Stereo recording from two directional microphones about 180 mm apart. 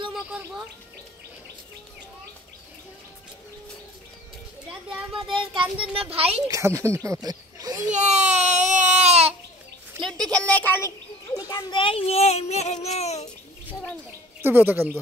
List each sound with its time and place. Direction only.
0.1 s bird: 5° right (ahead or behind)
5.3 s a child's voice: 30° right (ahead or behind)
6.4 s a child's voice: 15° right (ahead or behind)
7.9 s a sound: 40° right (ahead or behind)
10.0 s a child's voice: centre (ahead or behind); by 13.3 s 40° left (ahead or behind)
14.4 s speech: 10° right (ahead or behind)